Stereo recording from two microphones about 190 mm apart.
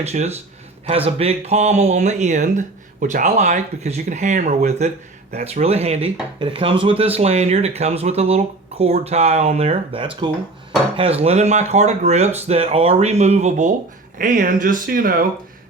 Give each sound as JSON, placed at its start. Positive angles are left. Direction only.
{"t": 0.0, "sound": "speech", "side_deg": -35}